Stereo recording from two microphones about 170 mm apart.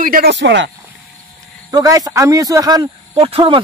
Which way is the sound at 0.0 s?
60° right (ahead or behind).